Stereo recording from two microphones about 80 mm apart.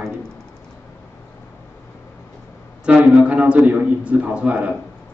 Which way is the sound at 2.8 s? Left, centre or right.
Centre.